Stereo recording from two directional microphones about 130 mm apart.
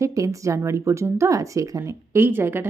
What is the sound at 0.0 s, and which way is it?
Speech, 25° right (ahead or behind).